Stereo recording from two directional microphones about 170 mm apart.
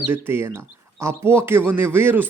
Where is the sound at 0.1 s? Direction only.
15° right (ahead or behind).